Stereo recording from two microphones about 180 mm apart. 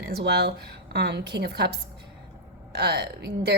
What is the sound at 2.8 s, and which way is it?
Speech, 65° right (ahead or behind).